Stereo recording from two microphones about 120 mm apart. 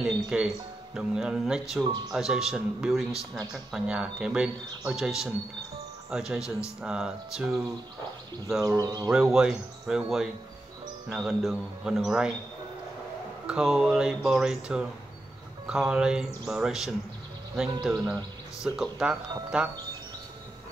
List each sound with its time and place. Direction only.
0.0 s speech: 5° right (ahead or behind)
1.9 s speech: 35° right (ahead or behind)
2.1 s speech: 5° right (ahead or behind)
8.6 s speech: 30° right (ahead or behind)
9.1 s speech: 5° right (ahead or behind)
13.5 s speech: 5° right (ahead or behind)